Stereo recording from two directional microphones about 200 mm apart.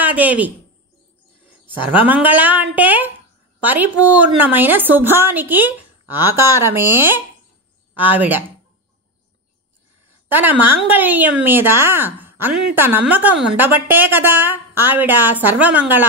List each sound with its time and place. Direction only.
0.0 s a woman's voice: 10° right (ahead or behind)
1.9 s a woman's voice: 10° right (ahead or behind)
10.2 s a woman's voice: 10° right (ahead or behind)